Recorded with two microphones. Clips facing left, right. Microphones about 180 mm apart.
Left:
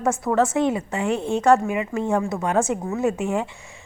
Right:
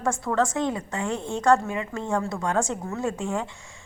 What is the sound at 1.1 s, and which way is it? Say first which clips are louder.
Speech: left 6 dB; 60° left (ahead or behind).